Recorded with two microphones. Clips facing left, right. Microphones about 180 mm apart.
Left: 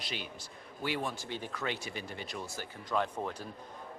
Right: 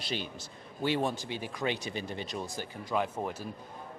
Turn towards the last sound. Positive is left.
turn(degrees=-10)  # may be behind; listen again after turning